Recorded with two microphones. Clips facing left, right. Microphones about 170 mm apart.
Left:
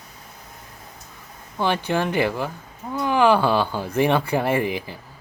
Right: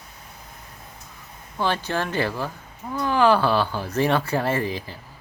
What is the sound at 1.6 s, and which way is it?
Speech, 15° left (ahead or behind).